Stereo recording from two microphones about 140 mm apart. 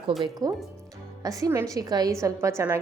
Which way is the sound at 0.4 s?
30° right (ahead or behind).